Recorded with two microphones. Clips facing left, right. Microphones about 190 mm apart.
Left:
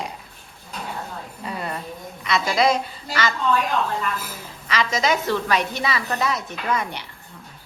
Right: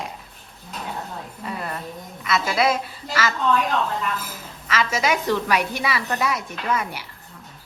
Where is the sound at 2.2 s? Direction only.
5° right (ahead or behind).